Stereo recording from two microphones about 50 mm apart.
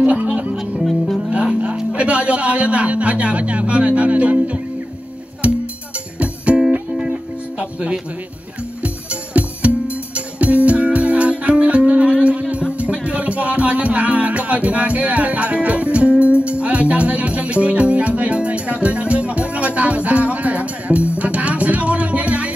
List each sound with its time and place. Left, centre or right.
0.0 s music: right
0.8 s music: centre
2.0 s music: right